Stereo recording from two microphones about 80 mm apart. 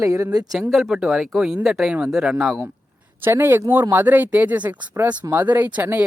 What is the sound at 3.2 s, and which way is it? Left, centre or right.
Speech, right.